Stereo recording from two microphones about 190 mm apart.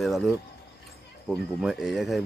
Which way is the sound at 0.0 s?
Centre (ahead or behind).